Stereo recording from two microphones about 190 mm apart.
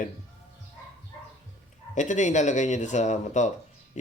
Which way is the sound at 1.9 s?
40° left (ahead or behind).